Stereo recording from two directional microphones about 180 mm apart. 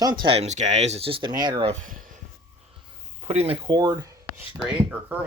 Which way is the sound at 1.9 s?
50° right (ahead or behind).